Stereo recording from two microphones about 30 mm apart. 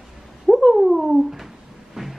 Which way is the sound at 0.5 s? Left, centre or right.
Centre.